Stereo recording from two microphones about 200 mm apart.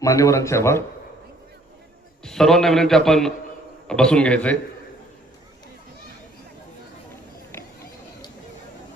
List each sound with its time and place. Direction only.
0.0 s a man's voice: 15° left (ahead or behind)
2.2 s a man's voice: centre (ahead or behind)